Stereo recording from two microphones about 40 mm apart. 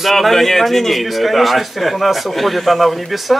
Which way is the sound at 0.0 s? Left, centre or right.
Centre.